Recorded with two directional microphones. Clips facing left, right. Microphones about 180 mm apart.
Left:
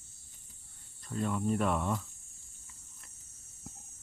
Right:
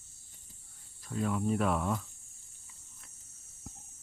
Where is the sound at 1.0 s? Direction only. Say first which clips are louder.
Right 1 dB; centre (ahead or behind).